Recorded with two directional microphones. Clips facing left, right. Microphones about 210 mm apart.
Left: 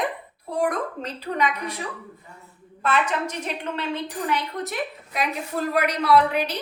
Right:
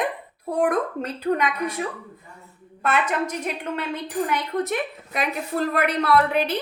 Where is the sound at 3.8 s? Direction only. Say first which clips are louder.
Right 4 dB; 50° right (ahead or behind).